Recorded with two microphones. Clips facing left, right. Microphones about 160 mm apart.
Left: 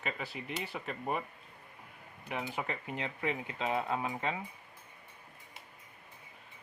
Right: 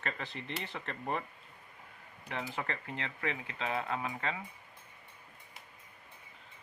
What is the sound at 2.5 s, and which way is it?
Speech, 10° left (ahead or behind).